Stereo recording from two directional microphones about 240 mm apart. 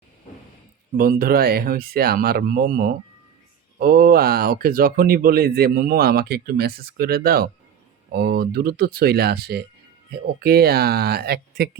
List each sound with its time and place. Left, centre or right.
0.9 s speech: right